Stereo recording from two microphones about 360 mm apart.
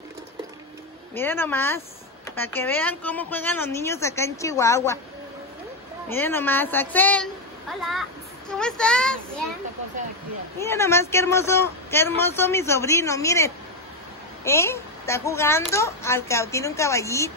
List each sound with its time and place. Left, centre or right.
1.1 s a woman's voice: centre
6.0 s a woman's voice: centre
10.6 s speech: centre